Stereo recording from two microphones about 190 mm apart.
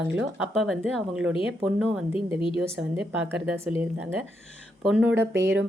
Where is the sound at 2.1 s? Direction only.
25° left (ahead or behind).